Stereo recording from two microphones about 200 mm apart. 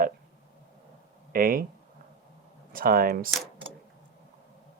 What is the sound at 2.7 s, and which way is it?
Speech, 45° right (ahead or behind).